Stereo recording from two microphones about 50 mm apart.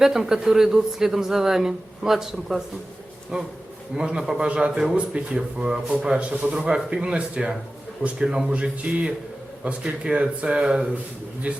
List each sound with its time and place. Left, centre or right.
0.0 s a woman's voice: centre
11.5 s a man's voice: right